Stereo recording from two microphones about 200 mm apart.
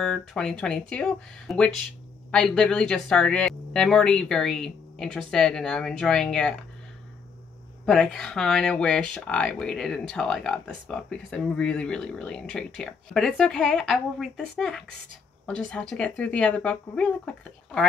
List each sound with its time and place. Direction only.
0.0 s speech: 5° left (ahead or behind)
7.8 s speech: 5° left (ahead or behind)